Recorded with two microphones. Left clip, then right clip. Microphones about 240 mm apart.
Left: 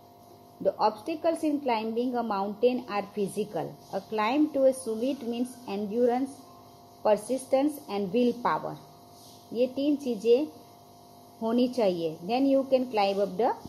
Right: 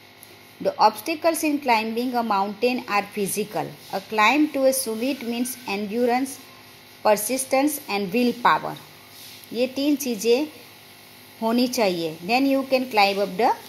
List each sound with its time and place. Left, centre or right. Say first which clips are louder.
0.7 s a woman's voice: right 7 dB; right
11.4 s a woman's voice: right 4 dB; right